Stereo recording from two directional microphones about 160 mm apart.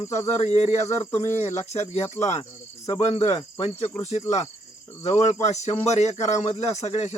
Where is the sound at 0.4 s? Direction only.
45° left (ahead or behind).